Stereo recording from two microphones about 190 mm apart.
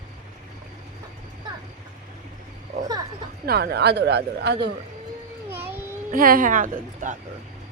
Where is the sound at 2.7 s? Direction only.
35° right (ahead or behind).